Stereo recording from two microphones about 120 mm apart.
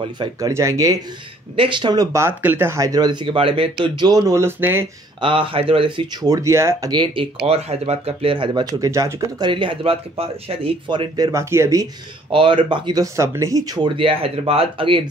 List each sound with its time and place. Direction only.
0.4 s speech: 25° right (ahead or behind)
1.6 s speech: 40° right (ahead or behind)
2.1 s speech: 20° right (ahead or behind)
5.2 s speech: 45° right (ahead or behind)
6.3 s speech: 25° right (ahead or behind)
6.9 s speech: 45° right (ahead or behind)
8.6 s speech: 30° right (ahead or behind)
9.5 s speech: 45° right (ahead or behind)
11.1 s speech: 30° right (ahead or behind)
12.3 s speech: 45° right (ahead or behind); by 13.7 s 30° right (ahead or behind)
13.8 s speech: 50° right (ahead or behind)